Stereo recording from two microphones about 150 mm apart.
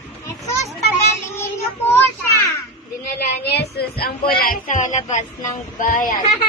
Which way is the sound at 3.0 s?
90° left.